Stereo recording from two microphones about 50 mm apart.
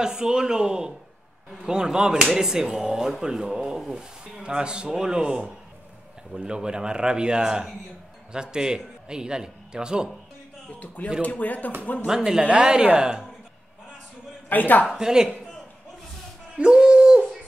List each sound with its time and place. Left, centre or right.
0.0 s speech: centre
10.7 s speech: left
12.1 s speech: centre
14.5 s speech: left
15.0 s speech: centre
16.5 s a sound: centre